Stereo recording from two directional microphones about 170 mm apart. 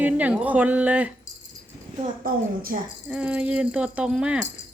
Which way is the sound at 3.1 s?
5° right (ahead or behind).